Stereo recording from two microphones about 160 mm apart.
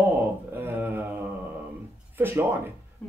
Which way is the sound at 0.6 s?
10° right (ahead or behind).